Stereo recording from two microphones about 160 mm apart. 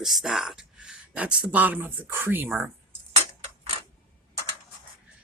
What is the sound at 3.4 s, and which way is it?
Mechanisms, 35° right (ahead or behind).